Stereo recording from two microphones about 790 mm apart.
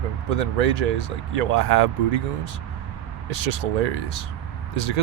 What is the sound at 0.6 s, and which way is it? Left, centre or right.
Speech, right.